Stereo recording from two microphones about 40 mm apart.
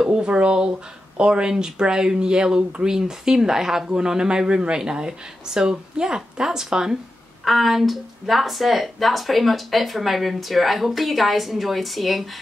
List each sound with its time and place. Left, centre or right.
0.0 s speech: right
7.4 s speech: centre